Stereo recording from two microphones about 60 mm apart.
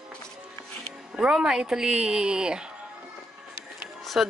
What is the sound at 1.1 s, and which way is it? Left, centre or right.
Speech, centre.